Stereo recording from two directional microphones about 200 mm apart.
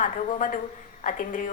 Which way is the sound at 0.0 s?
40° left (ahead or behind).